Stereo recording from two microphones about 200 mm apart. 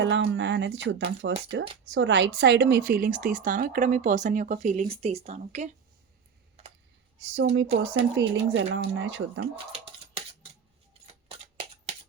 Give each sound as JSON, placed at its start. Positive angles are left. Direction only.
{"t": 0.0, "sound": "a woman's voice", "side_deg": -65}
{"t": 7.3, "sound": "speech", "side_deg": -60}
{"t": 9.7, "sound": "scissors", "side_deg": -30}